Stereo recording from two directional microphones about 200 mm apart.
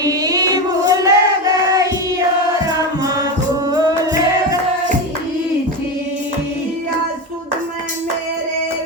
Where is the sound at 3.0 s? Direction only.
20° right (ahead or behind).